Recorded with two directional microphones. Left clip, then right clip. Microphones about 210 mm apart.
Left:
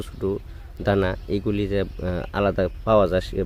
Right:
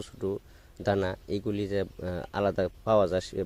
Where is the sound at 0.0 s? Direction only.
30° right (ahead or behind).